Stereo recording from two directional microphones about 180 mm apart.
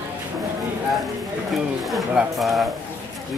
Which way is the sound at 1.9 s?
Centre (ahead or behind).